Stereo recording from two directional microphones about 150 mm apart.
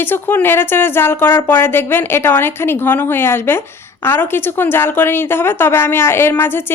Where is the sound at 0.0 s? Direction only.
15° left (ahead or behind).